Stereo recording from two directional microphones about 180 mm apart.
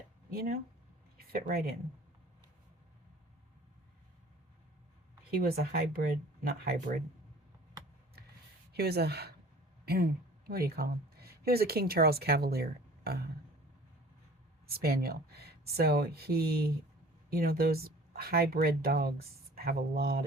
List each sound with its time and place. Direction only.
0.3 s speech: 55° right (ahead or behind)
5.3 s speech: 55° right (ahead or behind)
8.7 s speech: 60° right (ahead or behind)
14.7 s speech: 60° right (ahead or behind)